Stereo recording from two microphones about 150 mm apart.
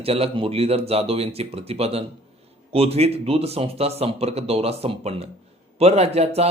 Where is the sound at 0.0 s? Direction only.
40° right (ahead or behind).